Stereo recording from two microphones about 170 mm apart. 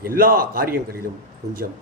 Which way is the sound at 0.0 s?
60° right (ahead or behind).